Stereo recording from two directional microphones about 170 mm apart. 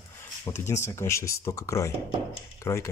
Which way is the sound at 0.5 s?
15° left (ahead or behind).